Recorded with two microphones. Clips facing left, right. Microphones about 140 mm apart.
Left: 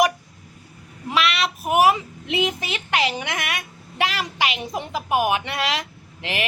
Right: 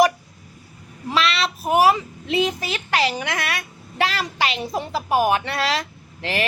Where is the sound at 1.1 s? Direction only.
15° left (ahead or behind).